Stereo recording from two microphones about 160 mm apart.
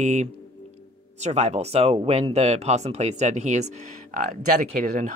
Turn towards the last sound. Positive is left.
turn(degrees=-50)  # may be behind; listen again after turning